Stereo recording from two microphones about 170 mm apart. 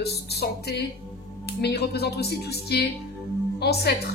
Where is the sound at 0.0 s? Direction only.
70° left (ahead or behind).